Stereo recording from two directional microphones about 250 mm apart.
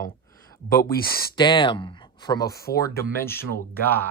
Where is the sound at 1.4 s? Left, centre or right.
Centre.